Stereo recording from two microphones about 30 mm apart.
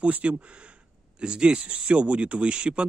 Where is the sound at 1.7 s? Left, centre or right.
Right.